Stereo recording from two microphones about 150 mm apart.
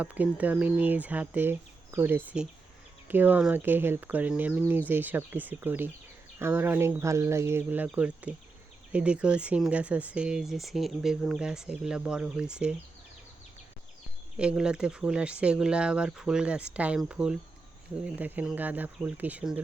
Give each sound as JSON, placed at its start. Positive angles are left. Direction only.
{"t": 0.0, "sound": "speech", "side_deg": -10}
{"t": 14.3, "sound": "speech", "side_deg": -5}